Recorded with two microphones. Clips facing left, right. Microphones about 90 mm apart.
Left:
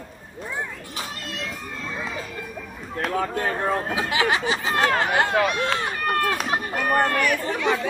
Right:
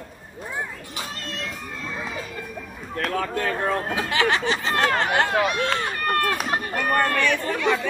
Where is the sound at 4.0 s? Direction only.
10° left (ahead or behind).